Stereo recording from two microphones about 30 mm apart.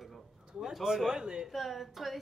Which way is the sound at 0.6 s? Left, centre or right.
Centre.